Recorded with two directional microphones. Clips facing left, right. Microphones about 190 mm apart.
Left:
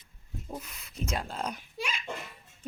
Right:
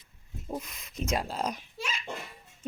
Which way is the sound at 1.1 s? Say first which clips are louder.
Right 4 dB; 5° right (ahead or behind).